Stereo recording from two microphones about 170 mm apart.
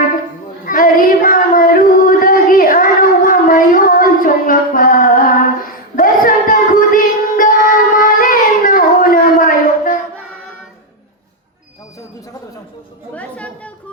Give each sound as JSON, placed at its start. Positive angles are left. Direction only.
{"t": 0.6, "sound": "child singing", "side_deg": 55}
{"t": 13.1, "sound": "chatter", "side_deg": 10}